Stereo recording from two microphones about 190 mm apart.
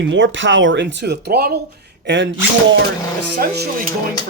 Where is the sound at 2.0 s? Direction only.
70° right (ahead or behind).